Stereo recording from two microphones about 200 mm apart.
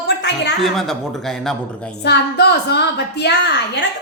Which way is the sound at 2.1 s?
55° left (ahead or behind).